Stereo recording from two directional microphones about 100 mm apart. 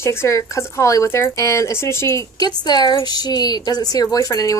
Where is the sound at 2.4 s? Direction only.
45° left (ahead or behind).